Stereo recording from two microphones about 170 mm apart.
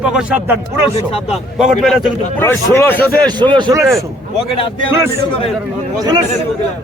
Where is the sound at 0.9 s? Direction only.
35° left (ahead or behind).